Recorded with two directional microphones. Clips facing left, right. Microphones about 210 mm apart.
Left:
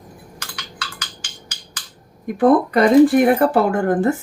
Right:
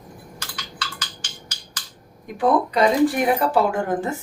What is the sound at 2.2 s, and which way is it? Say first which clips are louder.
Speech: left 6 dB; 55° left (ahead or behind).